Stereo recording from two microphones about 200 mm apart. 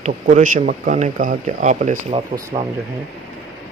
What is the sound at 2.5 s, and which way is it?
Speech, 20° right (ahead or behind).